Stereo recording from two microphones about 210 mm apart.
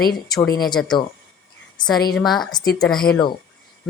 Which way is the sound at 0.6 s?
20° left (ahead or behind).